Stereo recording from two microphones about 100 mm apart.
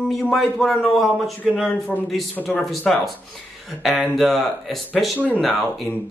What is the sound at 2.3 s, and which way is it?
Speech, 15° left (ahead or behind).